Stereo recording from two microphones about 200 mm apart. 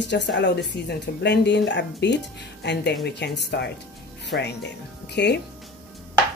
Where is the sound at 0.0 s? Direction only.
60° left (ahead or behind).